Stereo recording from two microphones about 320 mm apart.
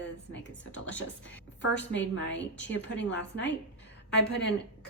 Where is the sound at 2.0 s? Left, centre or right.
Left.